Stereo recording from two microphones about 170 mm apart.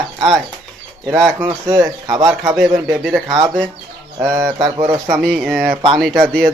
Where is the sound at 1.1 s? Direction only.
15° right (ahead or behind).